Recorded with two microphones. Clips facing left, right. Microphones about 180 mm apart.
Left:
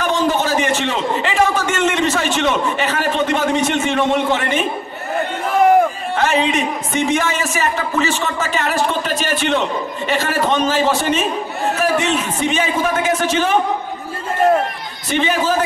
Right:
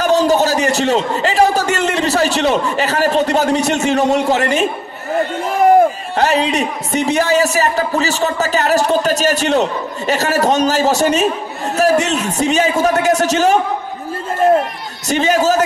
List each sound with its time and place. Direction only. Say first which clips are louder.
0.0 s a man's voice: right 5 dB; 40° right (ahead or behind)
6.1 s a man's voice: right 1 dB; 35° right (ahead or behind)
15.0 s a man's voice: right 4 dB; 40° right (ahead or behind)